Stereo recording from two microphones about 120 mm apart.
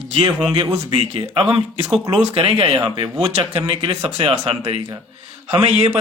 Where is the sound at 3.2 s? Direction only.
50° right (ahead or behind).